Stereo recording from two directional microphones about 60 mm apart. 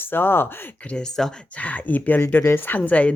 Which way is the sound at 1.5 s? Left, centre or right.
Left.